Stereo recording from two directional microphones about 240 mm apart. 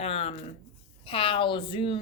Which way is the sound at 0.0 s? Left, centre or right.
Left.